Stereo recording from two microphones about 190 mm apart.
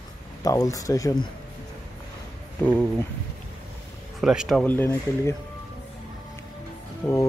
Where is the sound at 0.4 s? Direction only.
20° left (ahead or behind).